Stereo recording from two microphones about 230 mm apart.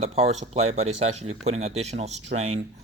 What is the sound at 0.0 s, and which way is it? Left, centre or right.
Speech, right.